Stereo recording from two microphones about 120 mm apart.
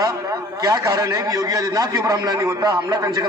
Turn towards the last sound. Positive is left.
turn(degrees=-30)  # may be behind; listen again after turning